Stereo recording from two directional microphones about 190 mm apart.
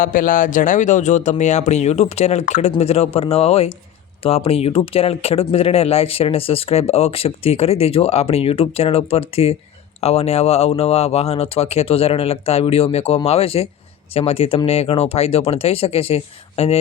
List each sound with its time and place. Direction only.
0.0 s speech: 45° left (ahead or behind)